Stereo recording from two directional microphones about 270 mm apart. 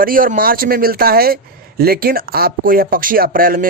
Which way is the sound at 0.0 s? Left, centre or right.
Right.